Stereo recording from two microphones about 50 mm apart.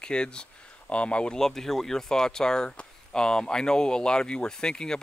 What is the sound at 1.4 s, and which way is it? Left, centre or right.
Speech, centre.